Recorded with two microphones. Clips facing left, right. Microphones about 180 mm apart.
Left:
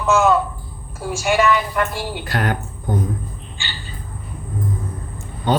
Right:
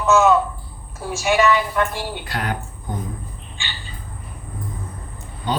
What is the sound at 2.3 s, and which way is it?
Speech, 50° left (ahead or behind).